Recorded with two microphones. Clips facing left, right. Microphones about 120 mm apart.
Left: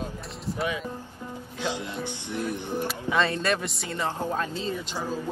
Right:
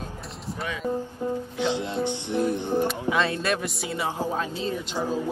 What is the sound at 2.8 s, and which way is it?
Speech, centre (ahead or behind).